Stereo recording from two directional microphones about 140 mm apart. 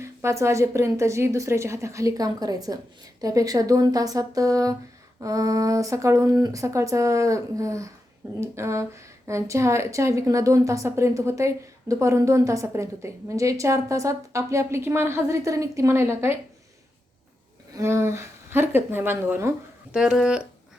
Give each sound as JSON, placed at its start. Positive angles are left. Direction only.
{"t": 0.0, "sound": "a woman's voice", "side_deg": -20}
{"t": 17.7, "sound": "a woman's voice", "side_deg": -20}
{"t": 19.9, "sound": "a woman's voice", "side_deg": -5}